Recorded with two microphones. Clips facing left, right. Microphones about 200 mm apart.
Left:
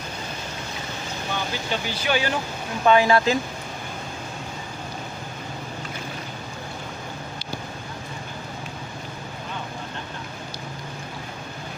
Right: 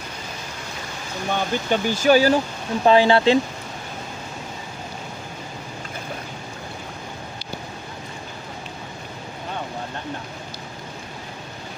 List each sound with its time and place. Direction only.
1.3 s speech: 50° right (ahead or behind); by 3.3 s 30° right (ahead or behind)